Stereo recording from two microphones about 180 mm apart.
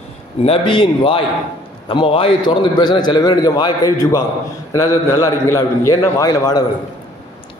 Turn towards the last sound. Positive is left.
turn(degrees=20)  # may be behind; listen again after turning